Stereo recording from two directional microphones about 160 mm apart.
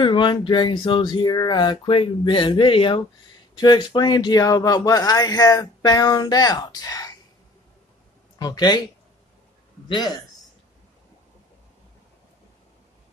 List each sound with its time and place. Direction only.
0.0 s speech: 30° left (ahead or behind)
8.4 s speech: 25° left (ahead or behind)
9.8 s a man's voice: 30° left (ahead or behind)